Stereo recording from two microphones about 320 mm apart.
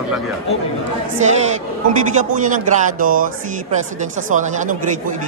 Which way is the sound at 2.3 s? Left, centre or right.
Right.